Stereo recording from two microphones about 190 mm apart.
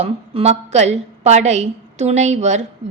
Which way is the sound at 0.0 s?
35° right (ahead or behind).